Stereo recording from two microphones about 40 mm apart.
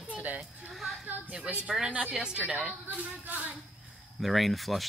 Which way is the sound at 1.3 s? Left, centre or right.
Right.